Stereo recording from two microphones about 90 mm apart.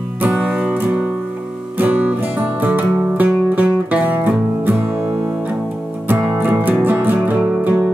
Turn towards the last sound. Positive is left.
turn(degrees=-20)  # may be behind; listen again after turning